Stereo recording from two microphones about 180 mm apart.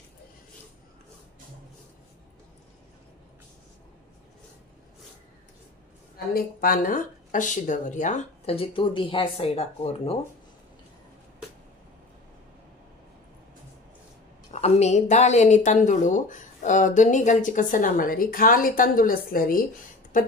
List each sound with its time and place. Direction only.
6.1 s a woman's voice: 55° left (ahead or behind); by 10.1 s 35° left (ahead or behind)
14.5 s a woman's voice: 40° left (ahead or behind)